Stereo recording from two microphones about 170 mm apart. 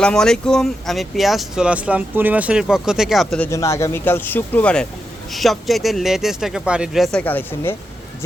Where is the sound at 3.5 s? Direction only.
15° left (ahead or behind).